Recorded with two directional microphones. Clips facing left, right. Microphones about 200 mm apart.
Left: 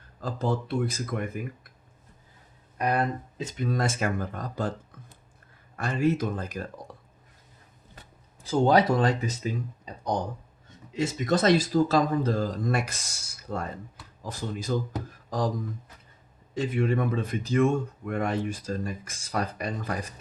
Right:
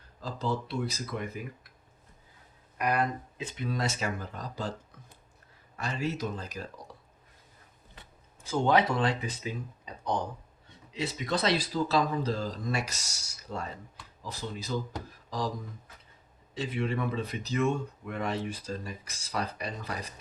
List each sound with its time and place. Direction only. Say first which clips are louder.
0.2 s speech: left 4 dB; 50° left (ahead or behind)
2.7 s speech: left 2 dB; 30° left (ahead or behind); by 4.7 s 55° left (ahead or behind)
5.7 s speech: left 8 dB; 55° left (ahead or behind)
8.4 s speech: left 4 dB; 40° left (ahead or behind)
16.6 s speech: left 5 dB; 45° left (ahead or behind)